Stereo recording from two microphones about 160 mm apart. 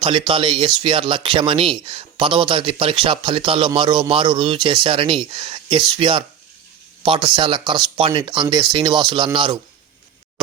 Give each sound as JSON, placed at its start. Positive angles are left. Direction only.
{"t": 0.0, "sound": "speech", "side_deg": -30}